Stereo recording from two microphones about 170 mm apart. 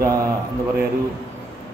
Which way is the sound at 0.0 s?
20° right (ahead or behind).